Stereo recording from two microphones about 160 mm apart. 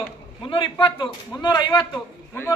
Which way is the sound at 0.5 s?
30° left (ahead or behind).